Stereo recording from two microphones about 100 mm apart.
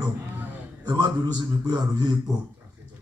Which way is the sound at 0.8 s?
50° right (ahead or behind).